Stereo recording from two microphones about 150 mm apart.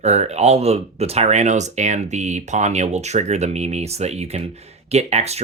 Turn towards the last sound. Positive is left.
turn(degrees=-45)  # may be behind; listen again after turning